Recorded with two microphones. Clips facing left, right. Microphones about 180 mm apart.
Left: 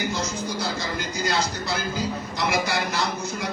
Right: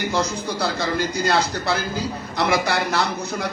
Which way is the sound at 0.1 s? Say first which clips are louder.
Right 4 dB; 65° right (ahead or behind).